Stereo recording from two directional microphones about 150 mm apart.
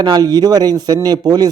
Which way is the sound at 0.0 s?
25° right (ahead or behind).